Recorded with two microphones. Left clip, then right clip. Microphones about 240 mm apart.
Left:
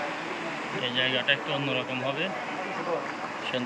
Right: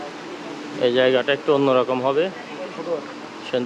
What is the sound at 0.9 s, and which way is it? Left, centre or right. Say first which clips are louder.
Speech: right 9 dB; centre.